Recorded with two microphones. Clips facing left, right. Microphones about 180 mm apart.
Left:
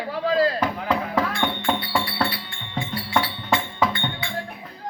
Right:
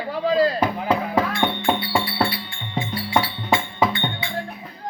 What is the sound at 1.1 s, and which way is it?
Speech, 15° right (ahead or behind).